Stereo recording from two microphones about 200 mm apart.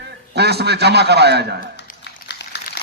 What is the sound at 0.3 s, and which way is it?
A man's voice, 55° right (ahead or behind).